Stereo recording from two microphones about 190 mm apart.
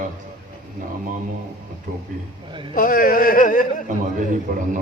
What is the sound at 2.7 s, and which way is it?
Speech, 50° left (ahead or behind).